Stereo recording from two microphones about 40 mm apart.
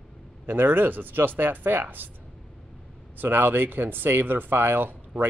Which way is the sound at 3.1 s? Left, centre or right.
Right.